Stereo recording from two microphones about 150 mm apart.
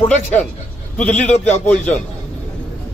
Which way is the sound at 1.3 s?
50° left (ahead or behind).